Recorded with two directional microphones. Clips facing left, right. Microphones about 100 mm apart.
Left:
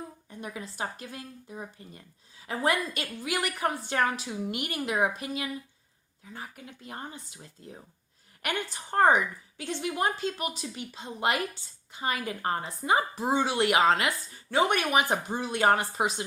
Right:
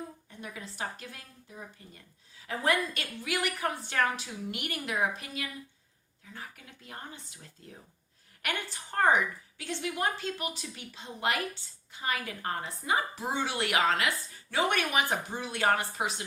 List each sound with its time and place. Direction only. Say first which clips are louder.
0.3 s a woman's voice: left 4 dB; 20° left (ahead or behind)
2.6 s a woman's voice: left 1 dB; 20° left (ahead or behind)
8.4 s a woman's voice: left 3 dB; 30° left (ahead or behind)